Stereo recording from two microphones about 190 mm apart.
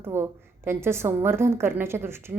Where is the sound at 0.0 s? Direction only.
10° right (ahead or behind).